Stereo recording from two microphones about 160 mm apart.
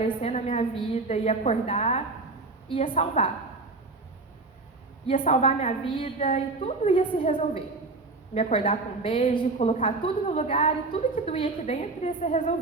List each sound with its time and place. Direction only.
0.0 s a woman's voice: 40° left (ahead or behind)
2.6 s a woman's voice: 35° left (ahead or behind)
5.2 s a woman's voice: 35° left (ahead or behind)
8.3 s a woman's voice: 45° left (ahead or behind)